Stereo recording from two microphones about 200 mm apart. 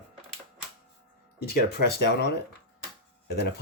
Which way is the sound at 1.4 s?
50° left (ahead or behind).